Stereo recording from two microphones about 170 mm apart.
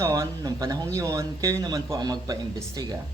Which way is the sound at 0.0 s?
20° right (ahead or behind).